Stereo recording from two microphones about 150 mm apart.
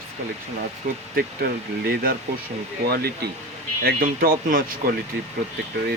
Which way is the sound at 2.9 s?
90° right.